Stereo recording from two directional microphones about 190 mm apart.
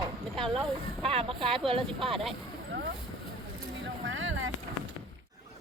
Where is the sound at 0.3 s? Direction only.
Centre (ahead or behind).